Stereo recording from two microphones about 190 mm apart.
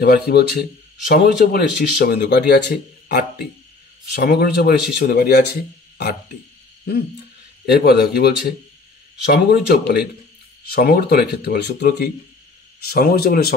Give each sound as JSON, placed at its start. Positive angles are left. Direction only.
{"t": 0.0, "sound": "speech", "side_deg": 55}
{"t": 7.6, "sound": "speech", "side_deg": 55}